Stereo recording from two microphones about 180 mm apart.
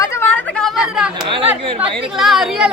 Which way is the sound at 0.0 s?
15° left (ahead or behind).